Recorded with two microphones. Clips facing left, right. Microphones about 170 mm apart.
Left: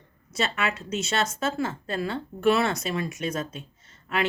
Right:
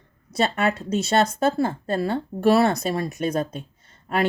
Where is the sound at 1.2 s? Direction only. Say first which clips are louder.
Right 7 dB; 60° right (ahead or behind).